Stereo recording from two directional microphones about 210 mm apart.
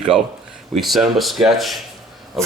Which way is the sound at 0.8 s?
Centre (ahead or behind).